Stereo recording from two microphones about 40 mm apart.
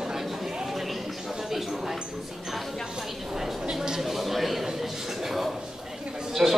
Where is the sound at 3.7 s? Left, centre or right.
Centre.